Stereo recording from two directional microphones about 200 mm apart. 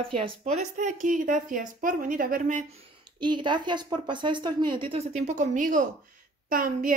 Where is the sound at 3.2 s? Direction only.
25° right (ahead or behind).